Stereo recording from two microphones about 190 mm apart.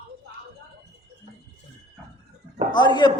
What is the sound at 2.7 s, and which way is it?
Speech, 25° left (ahead or behind).